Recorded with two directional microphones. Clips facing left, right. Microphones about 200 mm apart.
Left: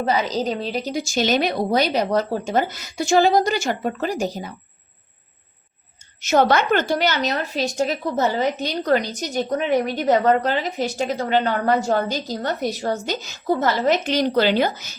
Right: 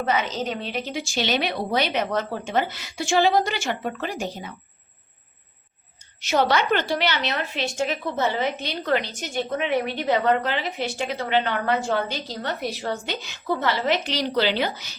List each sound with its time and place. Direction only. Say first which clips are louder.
0.0 s a woman's voice: left 3 dB; 35° left (ahead or behind)
6.2 s a woman's voice: left 4 dB; 50° left (ahead or behind)